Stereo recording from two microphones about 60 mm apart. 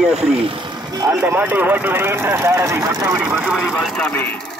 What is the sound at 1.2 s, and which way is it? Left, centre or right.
Speech, right.